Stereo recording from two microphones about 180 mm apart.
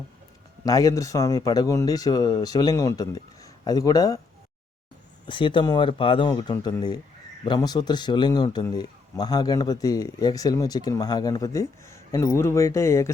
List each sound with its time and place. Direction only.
0.6 s a man's voice: 20° left (ahead or behind)
5.2 s a man's voice: 25° left (ahead or behind)